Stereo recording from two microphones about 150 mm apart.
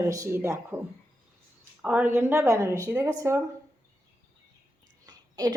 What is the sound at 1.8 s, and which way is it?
A woman's voice, 10° right (ahead or behind).